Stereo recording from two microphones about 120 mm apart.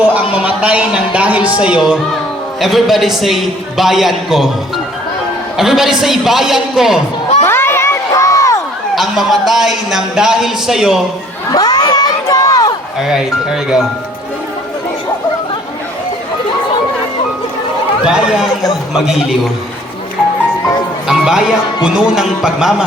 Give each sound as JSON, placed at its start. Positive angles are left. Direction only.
{"t": 0.0, "sound": "a man's voice", "side_deg": -10}
{"t": 5.5, "sound": "a man's voice", "side_deg": -5}
{"t": 7.4, "sound": "crowd", "side_deg": 20}
{"t": 9.0, "sound": "a man's voice", "side_deg": 0}
{"t": 11.5, "sound": "crowd", "side_deg": 35}
{"t": 13.0, "sound": "a man's voice", "side_deg": -5}
{"t": 18.0, "sound": "a man's voice", "side_deg": -5}
{"t": 21.1, "sound": "a man's voice", "side_deg": -5}